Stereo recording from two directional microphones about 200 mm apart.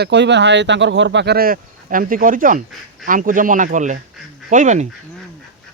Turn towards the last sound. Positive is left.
turn(degrees=-40)  # may be behind; listen again after turning